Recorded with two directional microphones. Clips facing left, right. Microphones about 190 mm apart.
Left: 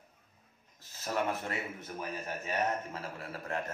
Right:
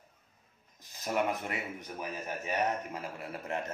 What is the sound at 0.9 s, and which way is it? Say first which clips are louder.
Speech: right 2 dB; 15° right (ahead or behind).